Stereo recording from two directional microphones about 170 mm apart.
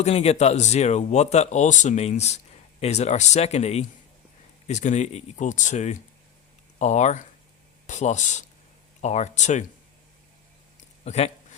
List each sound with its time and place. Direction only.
0.0 s speech: 35° left (ahead or behind)
11.0 s speech: 40° left (ahead or behind)